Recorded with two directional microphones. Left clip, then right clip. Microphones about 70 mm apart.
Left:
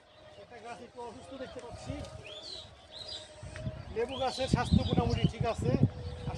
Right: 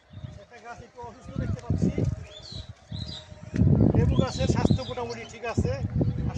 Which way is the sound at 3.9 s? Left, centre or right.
Left.